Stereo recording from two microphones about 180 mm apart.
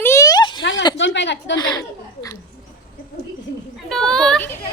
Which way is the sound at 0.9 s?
85° left.